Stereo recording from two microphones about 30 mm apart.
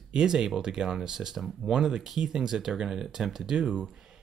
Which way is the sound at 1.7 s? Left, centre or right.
Right.